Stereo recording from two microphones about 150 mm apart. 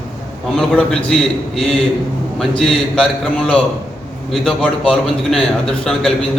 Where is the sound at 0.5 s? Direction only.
5° left (ahead or behind).